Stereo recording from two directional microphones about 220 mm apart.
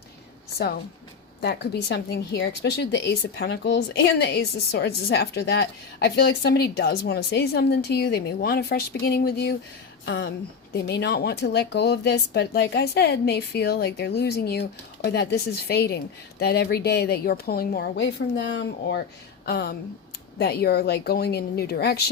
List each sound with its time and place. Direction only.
1.4 s a woman's voice: 50° left (ahead or behind)
10.8 s a woman's voice: 45° left (ahead or behind)